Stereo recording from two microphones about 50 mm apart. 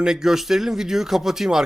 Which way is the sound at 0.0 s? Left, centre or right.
Centre.